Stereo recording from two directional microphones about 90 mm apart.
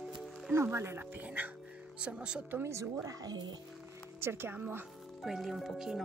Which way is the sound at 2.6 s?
35° right (ahead or behind).